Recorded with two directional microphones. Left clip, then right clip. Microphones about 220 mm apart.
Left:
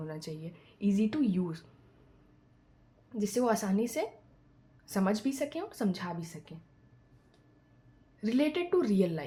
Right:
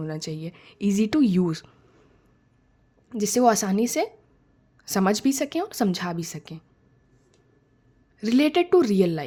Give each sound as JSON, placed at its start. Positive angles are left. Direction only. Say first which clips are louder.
{"t": 0.0, "sound": "a woman's voice", "louder": "right 9 dB", "side_deg": -40}
{"t": 3.1, "sound": "a woman's voice", "louder": "right 10 dB", "side_deg": -45}
{"t": 8.2, "sound": "a woman's voice", "louder": "right 9 dB", "side_deg": -45}